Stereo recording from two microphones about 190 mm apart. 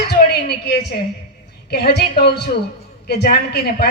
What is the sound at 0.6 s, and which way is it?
A woman's voice, 60° left (ahead or behind).